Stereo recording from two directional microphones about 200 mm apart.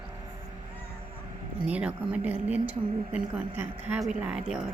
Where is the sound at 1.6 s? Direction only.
5° right (ahead or behind).